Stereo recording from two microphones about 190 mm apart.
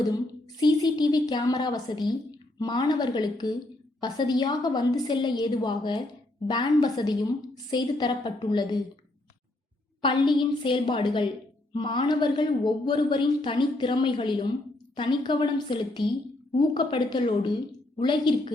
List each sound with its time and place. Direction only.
0.6 s a woman's voice: 20° left (ahead or behind)
10.0 s a woman's voice: 25° left (ahead or behind)